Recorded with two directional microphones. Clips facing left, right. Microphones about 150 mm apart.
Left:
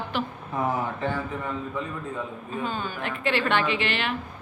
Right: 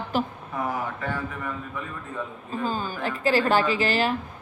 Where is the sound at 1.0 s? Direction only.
25° left (ahead or behind).